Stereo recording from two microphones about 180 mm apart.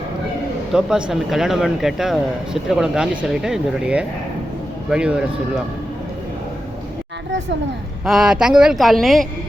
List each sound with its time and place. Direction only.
0.7 s speech: 5° right (ahead or behind)
8.0 s speech: centre (ahead or behind)